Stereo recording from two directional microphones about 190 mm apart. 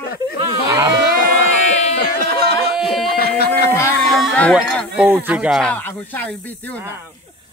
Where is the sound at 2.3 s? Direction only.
55° right (ahead or behind).